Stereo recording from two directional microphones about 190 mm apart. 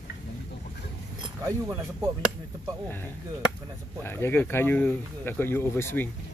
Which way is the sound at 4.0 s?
10° left (ahead or behind).